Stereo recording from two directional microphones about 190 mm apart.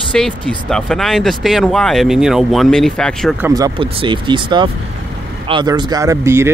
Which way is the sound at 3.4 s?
20° right (ahead or behind).